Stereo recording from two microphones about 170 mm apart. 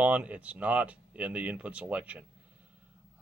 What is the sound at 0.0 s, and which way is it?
Speech, 10° right (ahead or behind).